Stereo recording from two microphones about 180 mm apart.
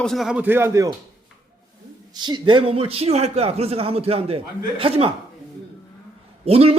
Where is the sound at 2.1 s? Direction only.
25° right (ahead or behind).